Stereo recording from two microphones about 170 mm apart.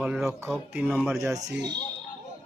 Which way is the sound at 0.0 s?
5° right (ahead or behind).